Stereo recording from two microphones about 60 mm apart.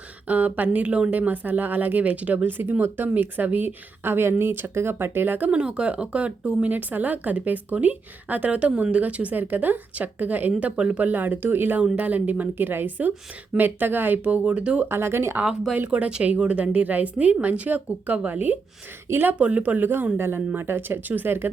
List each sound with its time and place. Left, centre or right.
0.3 s speech: right
5.5 s speech: centre; by 11.8 s right
11.9 s speech: right
14.8 s speech: right
15.9 s speech: centre; by 19.4 s right
19.4 s speech: right
20.1 s speech: right